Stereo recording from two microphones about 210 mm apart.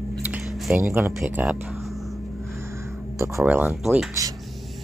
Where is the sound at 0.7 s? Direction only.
10° right (ahead or behind).